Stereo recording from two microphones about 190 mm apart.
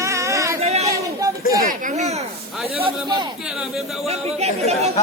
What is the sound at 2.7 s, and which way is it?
A man's voice, 25° right (ahead or behind).